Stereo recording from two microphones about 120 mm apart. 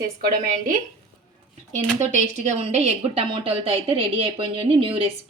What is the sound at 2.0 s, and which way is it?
Speech, 70° right (ahead or behind).